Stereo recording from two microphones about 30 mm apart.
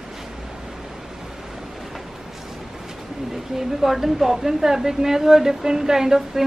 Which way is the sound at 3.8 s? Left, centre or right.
Centre.